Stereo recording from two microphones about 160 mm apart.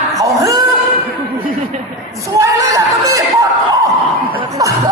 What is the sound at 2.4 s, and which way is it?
Speech, 20° right (ahead or behind).